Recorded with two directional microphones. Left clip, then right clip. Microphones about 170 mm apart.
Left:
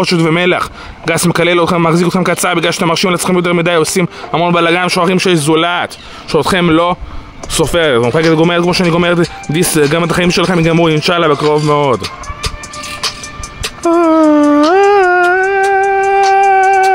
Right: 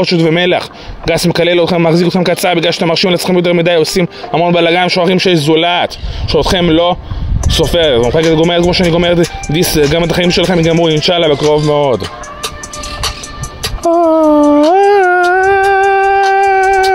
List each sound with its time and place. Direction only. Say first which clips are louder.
0.0 s speech: right 1 dB; 20° left (ahead or behind)
13.9 s a sound: right 1 dB; 20° left (ahead or behind)
15.2 s music: right 2 dB; 45° right (ahead or behind)
16.3 s music: left 1 dB; 20° right (ahead or behind)